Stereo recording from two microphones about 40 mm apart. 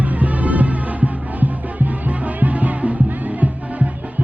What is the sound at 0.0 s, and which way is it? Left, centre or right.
Music, right.